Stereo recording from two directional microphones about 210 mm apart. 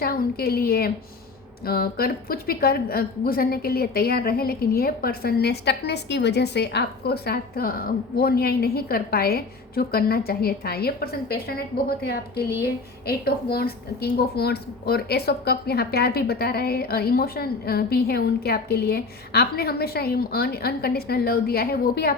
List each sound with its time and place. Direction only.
0.0 s a woman's voice: 45° left (ahead or behind)